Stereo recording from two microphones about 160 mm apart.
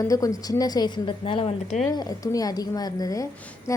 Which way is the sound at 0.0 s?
20° left (ahead or behind).